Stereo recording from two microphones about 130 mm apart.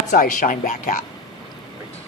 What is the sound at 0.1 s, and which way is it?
Speech, 90° left.